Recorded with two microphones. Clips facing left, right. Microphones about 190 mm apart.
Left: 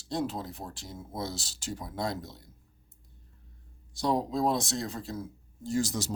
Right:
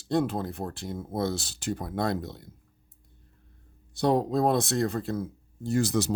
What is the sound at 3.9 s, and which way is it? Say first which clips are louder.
Speech: right 5 dB; 60° right (ahead or behind).